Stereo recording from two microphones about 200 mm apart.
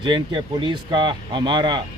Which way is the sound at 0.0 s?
25° right (ahead or behind).